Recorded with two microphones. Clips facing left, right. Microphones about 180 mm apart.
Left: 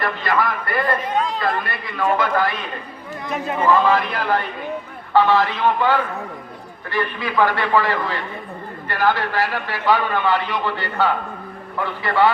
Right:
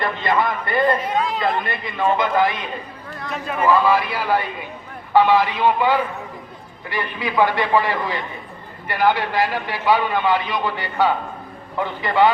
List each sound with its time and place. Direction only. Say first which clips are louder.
0.0 s a man's voice: right 1 dB; 20° right (ahead or behind)
1.0 s a man's voice: even; 10° right (ahead or behind)
3.6 s a man's voice: even; 10° right (ahead or behind)